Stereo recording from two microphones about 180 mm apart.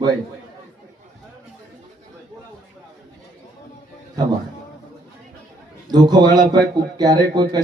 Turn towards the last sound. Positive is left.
turn(degrees=-25)  # may be behind; listen again after turning